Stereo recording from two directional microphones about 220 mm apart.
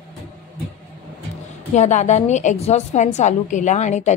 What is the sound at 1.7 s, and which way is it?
A woman's voice, 30° left (ahead or behind).